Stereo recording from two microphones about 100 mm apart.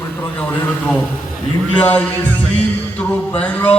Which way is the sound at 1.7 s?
15° left (ahead or behind).